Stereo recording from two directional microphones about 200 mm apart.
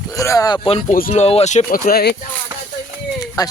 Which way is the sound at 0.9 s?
40° left (ahead or behind).